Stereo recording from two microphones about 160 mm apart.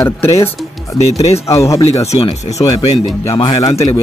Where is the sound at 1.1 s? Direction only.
40° left (ahead or behind).